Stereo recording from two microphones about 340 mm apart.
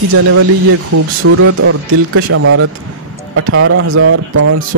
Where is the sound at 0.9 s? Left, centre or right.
Right.